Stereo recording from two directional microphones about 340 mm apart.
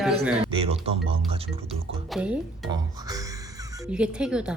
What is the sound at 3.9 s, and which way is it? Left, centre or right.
Speech, centre.